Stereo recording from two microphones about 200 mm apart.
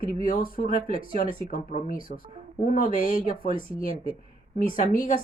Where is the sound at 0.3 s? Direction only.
45° left (ahead or behind).